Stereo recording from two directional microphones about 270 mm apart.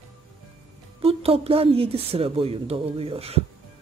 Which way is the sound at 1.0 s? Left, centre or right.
Right.